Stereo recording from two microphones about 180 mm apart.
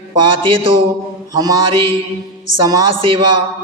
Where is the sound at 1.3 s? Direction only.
20° right (ahead or behind).